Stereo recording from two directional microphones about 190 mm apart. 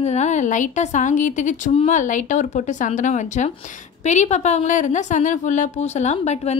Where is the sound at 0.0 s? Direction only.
35° left (ahead or behind).